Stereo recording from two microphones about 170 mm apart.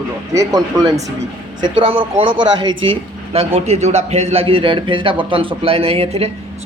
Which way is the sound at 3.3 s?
40° right (ahead or behind).